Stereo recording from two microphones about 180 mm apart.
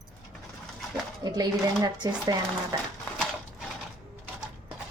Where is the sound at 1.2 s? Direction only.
20° right (ahead or behind).